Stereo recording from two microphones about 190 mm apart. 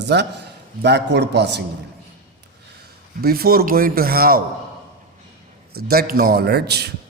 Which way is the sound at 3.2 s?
55° right (ahead or behind).